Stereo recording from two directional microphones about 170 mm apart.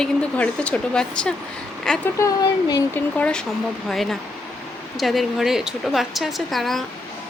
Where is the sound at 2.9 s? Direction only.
5° left (ahead or behind).